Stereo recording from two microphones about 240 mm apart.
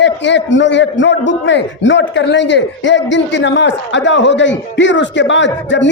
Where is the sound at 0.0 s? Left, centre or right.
Left.